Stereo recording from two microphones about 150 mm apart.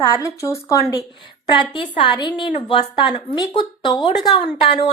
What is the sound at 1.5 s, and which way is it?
A woman's voice, 35° left (ahead or behind).